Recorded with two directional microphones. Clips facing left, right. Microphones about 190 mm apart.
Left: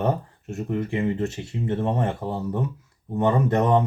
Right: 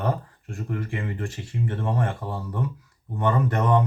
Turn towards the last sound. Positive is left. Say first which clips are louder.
# left 3 dB
turn(degrees=25)  # may be behind; listen again after turning